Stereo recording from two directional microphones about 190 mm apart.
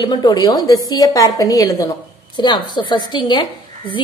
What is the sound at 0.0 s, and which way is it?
A woman's voice, 20° left (ahead or behind).